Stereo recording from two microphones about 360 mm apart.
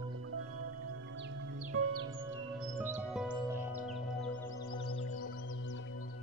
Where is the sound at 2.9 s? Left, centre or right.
Centre.